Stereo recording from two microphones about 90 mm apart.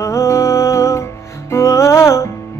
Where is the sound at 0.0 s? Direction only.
30° left (ahead or behind).